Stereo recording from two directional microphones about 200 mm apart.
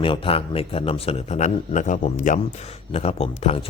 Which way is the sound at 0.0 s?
25° left (ahead or behind).